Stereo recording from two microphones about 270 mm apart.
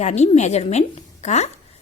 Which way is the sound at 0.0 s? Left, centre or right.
Left.